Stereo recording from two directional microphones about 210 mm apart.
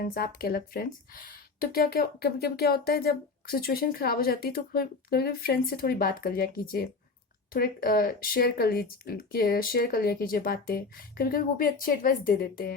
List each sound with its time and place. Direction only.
0.0 s speech: 45° left (ahead or behind)